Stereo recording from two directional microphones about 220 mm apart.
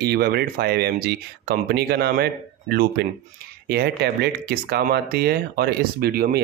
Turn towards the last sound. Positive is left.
turn(degrees=-45)  # may be behind; listen again after turning